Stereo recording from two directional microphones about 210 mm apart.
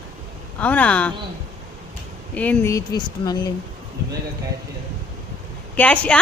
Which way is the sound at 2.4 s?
10° left (ahead or behind).